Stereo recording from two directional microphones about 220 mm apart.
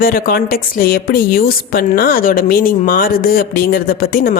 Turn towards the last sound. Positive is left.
turn(degrees=40)  # may be behind; listen again after turning